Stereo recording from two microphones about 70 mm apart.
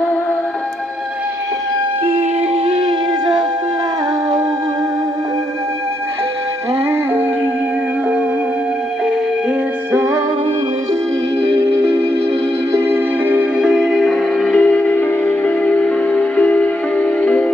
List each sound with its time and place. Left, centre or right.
12.7 s music: right
13.6 s music: centre
14.4 s music: centre